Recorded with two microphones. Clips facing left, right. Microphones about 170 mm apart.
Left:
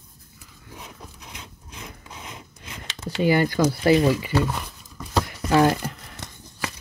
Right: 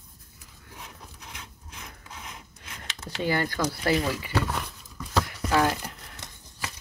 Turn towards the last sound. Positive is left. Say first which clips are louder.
# left 5 dB
turn(degrees=30)  # may be behind; listen again after turning